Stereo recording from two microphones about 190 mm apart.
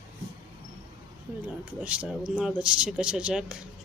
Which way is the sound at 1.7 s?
5° right (ahead or behind).